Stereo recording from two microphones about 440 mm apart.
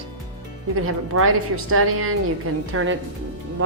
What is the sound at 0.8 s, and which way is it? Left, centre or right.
A woman's voice, right.